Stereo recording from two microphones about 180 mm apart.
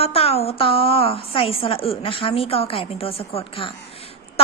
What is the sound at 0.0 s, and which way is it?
A woman's voice, 35° left (ahead or behind).